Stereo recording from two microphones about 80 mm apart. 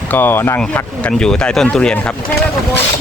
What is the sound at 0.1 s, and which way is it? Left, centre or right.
Speech, left.